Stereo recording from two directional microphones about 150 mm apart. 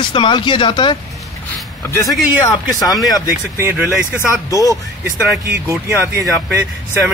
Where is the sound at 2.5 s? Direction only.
25° left (ahead or behind).